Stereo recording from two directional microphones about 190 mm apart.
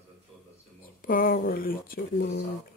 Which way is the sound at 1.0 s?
50° left (ahead or behind).